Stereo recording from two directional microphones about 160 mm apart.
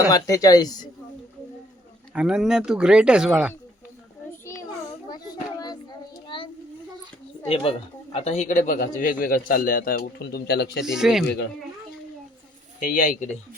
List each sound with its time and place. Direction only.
0.1 s speech: 20° left (ahead or behind)
2.1 s speech: 5° right (ahead or behind)
5.0 s children playing: 25° left (ahead or behind)
6.2 s a sound: 30° left (ahead or behind)
7.4 s a woman's voice: 35° left (ahead or behind); by 10.7 s 85° left
10.8 s speech: 5° right (ahead or behind)
12.8 s a woman's voice: 55° left (ahead or behind)